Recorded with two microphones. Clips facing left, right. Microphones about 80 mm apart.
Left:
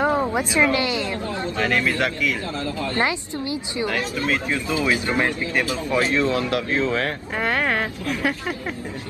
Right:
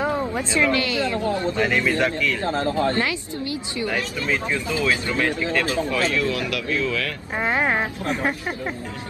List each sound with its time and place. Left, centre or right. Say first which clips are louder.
0.1 s speech: left 2 dB; centre
1.6 s speech: left 2 dB; centre
2.0 s speech: right 1 dB; centre
2.4 s speech: right 6 dB; right
3.0 s speech: left 2 dB; left
7.3 s speech: right 1 dB; centre